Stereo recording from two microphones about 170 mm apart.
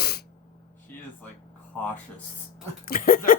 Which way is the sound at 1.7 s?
10° left (ahead or behind).